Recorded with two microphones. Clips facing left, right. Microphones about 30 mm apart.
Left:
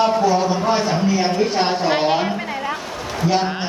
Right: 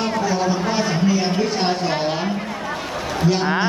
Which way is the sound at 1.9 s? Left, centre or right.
Left.